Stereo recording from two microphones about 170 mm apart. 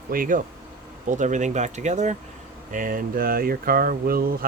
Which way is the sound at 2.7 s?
55° right (ahead or behind).